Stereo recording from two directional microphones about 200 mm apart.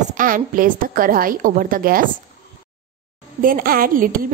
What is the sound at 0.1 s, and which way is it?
A woman's voice, 45° right (ahead or behind).